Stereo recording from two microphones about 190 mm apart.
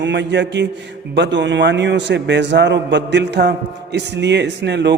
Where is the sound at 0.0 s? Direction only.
65° right (ahead or behind).